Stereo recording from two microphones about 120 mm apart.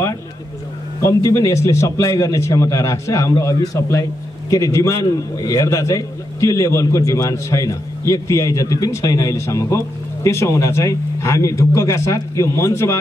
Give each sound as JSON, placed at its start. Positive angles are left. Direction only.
{"t": 1.0, "sound": "a man's voice", "side_deg": 25}